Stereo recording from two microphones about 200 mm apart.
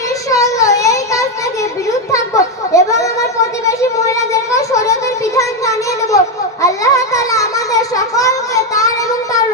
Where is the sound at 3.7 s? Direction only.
15° left (ahead or behind).